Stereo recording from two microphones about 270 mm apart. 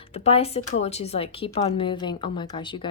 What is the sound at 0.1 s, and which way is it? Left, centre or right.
Speech, left.